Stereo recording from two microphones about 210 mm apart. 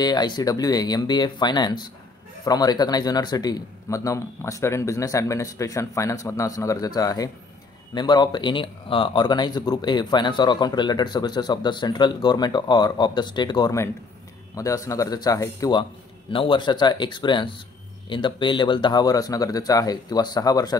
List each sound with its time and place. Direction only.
0.0 s a man's voice: 20° left (ahead or behind)